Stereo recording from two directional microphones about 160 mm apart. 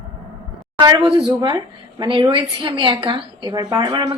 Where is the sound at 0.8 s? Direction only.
30° right (ahead or behind).